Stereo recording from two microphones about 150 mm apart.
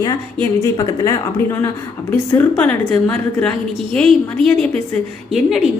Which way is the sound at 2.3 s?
10° left (ahead or behind).